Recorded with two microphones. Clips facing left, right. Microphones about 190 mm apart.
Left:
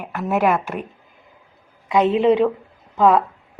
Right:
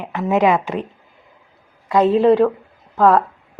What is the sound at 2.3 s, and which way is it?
Speech, centre (ahead or behind).